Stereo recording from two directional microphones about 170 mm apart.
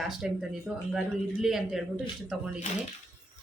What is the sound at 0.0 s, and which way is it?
Speech, centre (ahead or behind).